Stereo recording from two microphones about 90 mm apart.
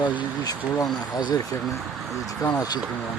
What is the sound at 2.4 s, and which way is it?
Speech, 45° left (ahead or behind).